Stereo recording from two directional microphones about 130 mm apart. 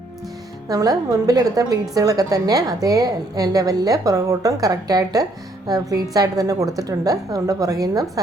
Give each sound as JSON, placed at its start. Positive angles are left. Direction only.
{"t": 0.7, "sound": "a woman's voice", "side_deg": -25}